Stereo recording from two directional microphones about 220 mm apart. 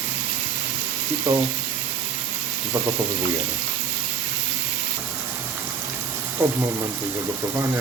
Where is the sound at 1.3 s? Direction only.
15° right (ahead or behind).